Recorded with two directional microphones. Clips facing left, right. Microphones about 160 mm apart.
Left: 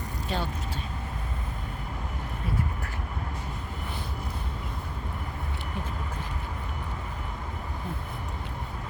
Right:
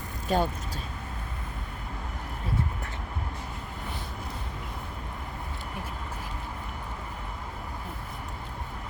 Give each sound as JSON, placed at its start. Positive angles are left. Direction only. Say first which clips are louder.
{"t": 0.3, "sound": "speech", "louder": "right 6 dB", "side_deg": -45}